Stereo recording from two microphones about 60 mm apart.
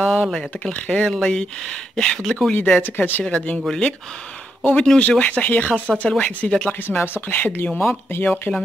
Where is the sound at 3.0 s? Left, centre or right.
Left.